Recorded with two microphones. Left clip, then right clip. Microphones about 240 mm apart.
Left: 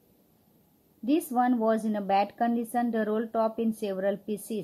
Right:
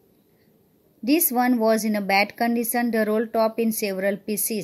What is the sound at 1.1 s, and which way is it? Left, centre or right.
Speech, right.